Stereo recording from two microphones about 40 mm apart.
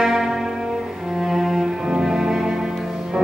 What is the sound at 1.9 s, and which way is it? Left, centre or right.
Music, centre.